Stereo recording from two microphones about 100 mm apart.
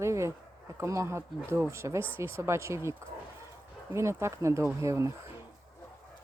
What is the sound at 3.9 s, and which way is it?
Speech, 30° right (ahead or behind).